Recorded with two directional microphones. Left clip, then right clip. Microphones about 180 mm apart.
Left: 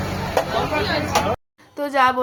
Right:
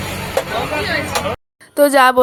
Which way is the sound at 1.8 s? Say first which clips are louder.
Right 7 dB; 50° right (ahead or behind).